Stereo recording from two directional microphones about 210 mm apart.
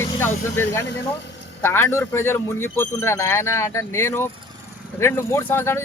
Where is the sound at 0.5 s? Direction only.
10° left (ahead or behind).